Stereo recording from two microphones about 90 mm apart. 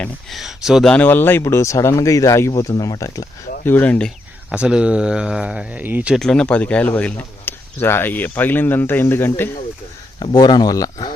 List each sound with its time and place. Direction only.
0.3 s speech: centre (ahead or behind)
0.9 s speech: 15° left (ahead or behind); by 3.2 s 40° left (ahead or behind)
3.6 s speech: 20° left (ahead or behind)
4.5 s speech: 10° right (ahead or behind)
6.1 s speech: 10° left (ahead or behind); by 9.5 s 25° left (ahead or behind)
10.3 s speech: 50° left (ahead or behind)